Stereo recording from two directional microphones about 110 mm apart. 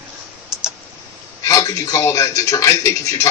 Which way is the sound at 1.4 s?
30° left (ahead or behind).